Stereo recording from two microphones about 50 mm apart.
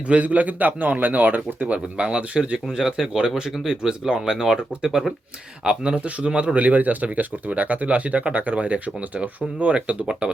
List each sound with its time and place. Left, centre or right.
0.1 s a man's voice: right